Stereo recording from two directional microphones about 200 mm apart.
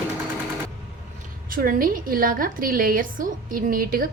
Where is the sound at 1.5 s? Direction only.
45° right (ahead or behind).